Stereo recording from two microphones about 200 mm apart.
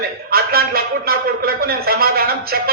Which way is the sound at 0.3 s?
50° right (ahead or behind).